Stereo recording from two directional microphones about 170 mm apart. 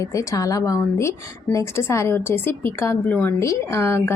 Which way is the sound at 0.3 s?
20° left (ahead or behind).